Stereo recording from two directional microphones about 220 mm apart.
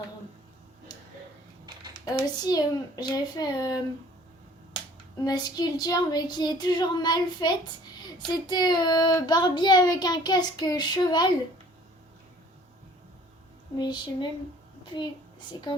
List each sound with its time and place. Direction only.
2.0 s a child's voice: 20° left (ahead or behind)
5.2 s child singing: 20° left (ahead or behind)
13.7 s child singing: 20° left (ahead or behind)
15.5 s a child's voice: 15° left (ahead or behind)